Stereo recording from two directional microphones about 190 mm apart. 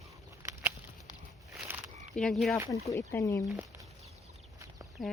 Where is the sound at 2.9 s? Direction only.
15° left (ahead or behind).